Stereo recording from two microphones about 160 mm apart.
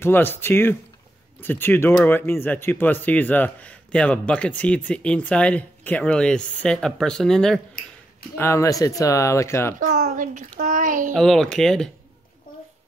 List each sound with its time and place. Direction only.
0.0 s speech: 15° left (ahead or behind)
8.4 s speech: 20° left (ahead or behind)
9.8 s a child's voice: 50° right (ahead or behind)
11.1 s a child's voice: centre (ahead or behind)